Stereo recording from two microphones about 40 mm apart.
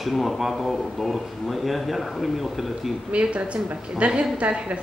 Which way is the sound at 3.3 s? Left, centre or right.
Right.